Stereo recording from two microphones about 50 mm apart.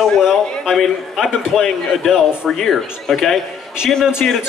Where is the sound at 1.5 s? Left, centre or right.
Centre.